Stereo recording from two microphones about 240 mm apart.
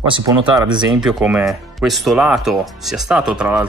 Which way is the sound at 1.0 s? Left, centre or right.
Centre.